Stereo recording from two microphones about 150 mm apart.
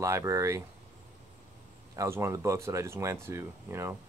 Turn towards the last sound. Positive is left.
turn(degrees=-20)  # may be behind; listen again after turning